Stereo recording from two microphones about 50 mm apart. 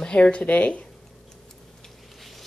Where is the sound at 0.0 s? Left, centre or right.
Left.